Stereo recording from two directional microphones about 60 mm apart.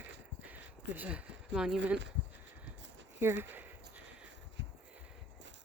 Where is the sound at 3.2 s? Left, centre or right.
Right.